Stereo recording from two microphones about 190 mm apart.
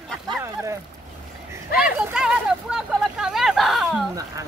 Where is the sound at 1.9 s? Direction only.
5° right (ahead or behind).